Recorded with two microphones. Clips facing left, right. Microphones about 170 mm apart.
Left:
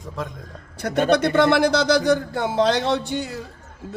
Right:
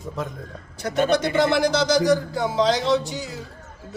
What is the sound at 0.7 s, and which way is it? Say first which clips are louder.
A man's voice: left 2 dB; 55° left (ahead or behind).